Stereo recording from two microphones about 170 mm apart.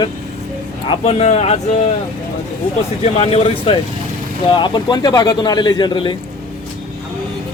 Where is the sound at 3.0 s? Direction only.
35° left (ahead or behind).